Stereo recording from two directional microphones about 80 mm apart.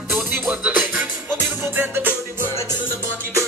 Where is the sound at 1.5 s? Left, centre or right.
Right.